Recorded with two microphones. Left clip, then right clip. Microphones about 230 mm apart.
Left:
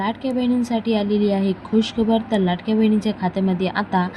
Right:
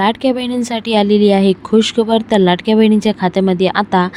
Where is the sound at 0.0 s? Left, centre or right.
Right.